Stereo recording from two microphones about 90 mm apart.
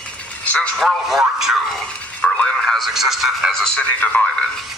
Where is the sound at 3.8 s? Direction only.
20° left (ahead or behind).